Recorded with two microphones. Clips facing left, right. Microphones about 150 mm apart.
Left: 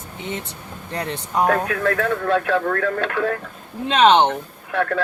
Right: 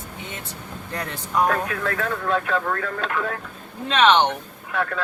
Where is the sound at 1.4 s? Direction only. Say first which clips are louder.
Left 4 dB; 65° left (ahead or behind).